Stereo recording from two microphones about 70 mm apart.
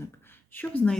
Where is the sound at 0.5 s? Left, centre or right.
Left.